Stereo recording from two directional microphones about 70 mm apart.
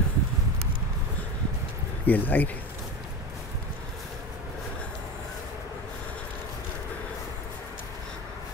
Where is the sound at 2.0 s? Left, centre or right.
Left.